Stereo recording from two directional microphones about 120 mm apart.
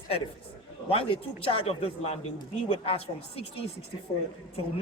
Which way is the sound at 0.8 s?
50° left (ahead or behind).